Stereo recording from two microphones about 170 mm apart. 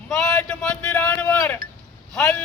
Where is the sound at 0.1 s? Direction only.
5° left (ahead or behind).